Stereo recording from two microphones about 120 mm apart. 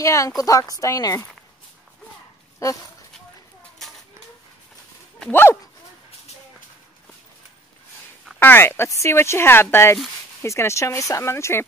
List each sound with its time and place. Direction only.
0.0 s speech: 25° left (ahead or behind)
5.3 s speech: 20° left (ahead or behind)
8.4 s speech: 15° left (ahead or behind)